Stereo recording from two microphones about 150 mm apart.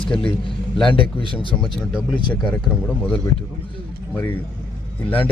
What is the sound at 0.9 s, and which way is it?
Speech, 35° left (ahead or behind).